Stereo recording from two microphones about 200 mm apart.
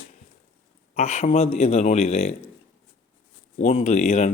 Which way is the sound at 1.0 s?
35° left (ahead or behind).